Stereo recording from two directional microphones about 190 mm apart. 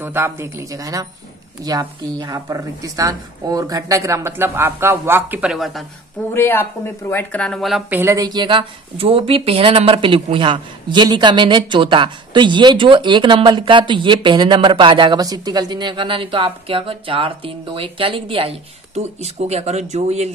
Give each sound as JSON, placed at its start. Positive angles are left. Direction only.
{"t": 0.0, "sound": "a woman's voice", "side_deg": -10}
{"t": 6.3, "sound": "speech", "side_deg": 10}
{"t": 8.0, "sound": "a woman's voice", "side_deg": -15}